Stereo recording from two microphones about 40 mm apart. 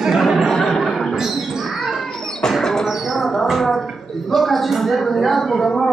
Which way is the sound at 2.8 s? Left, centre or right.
Centre.